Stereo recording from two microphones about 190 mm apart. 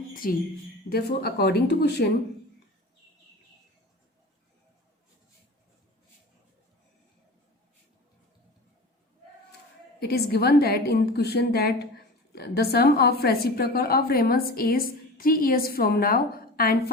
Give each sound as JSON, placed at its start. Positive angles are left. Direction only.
{"t": 0.1, "sound": "a sound", "side_deg": 50}
{"t": 0.9, "sound": "speech", "side_deg": 55}
{"t": 10.0, "sound": "a woman's voice", "side_deg": 55}